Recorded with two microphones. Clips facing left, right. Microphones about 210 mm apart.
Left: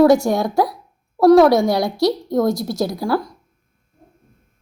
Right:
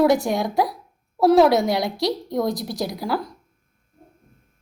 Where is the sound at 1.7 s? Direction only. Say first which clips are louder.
Left 5 dB; 20° right (ahead or behind).